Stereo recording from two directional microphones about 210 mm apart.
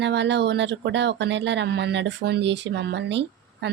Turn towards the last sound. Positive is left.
turn(degrees=-55)  # may be behind; listen again after turning